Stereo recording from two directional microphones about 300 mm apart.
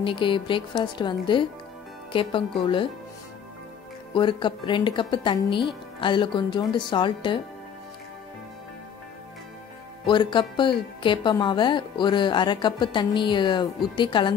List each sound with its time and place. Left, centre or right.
0.0 s speech: centre
4.1 s speech: centre
10.0 s speech: centre